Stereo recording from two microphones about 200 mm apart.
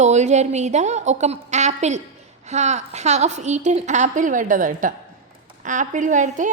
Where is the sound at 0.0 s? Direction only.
35° right (ahead or behind).